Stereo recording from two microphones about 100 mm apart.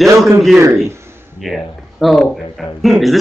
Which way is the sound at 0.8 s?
25° right (ahead or behind).